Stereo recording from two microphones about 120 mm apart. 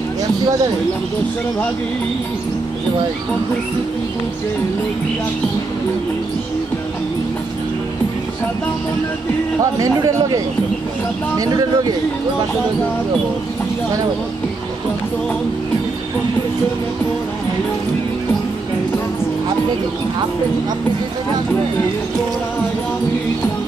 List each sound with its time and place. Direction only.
9.8 s speech: 30° right (ahead or behind)